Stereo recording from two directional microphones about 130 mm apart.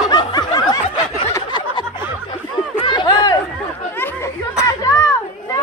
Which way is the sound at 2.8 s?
35° left (ahead or behind).